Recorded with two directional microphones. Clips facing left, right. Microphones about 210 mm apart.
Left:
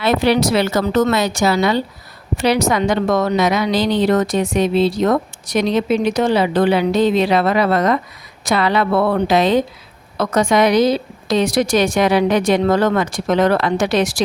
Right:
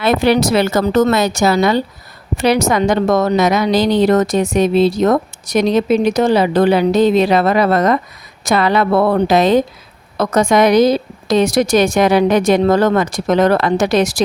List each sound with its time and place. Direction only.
0.0 s a woman's voice: 50° right (ahead or behind)